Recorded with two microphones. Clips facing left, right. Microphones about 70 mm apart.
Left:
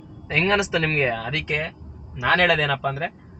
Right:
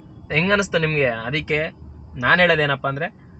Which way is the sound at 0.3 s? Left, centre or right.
Right.